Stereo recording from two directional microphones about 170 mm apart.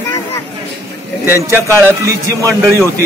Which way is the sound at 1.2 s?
15° right (ahead or behind).